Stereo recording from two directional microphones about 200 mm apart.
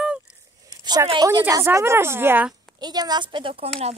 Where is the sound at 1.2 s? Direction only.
15° right (ahead or behind).